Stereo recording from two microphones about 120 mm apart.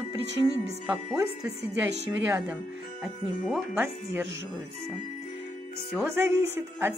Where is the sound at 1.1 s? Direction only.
25° right (ahead or behind).